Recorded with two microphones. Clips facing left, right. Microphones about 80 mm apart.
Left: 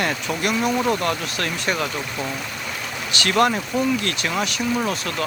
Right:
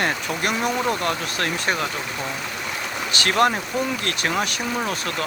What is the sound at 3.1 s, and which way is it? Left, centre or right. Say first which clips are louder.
Speech: left 1 dB; right.